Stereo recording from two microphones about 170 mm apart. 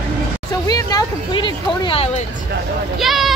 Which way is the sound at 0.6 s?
20° left (ahead or behind).